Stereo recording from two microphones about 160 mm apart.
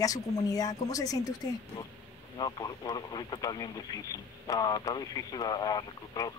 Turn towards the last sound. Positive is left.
turn(degrees=25)  # may be behind; listen again after turning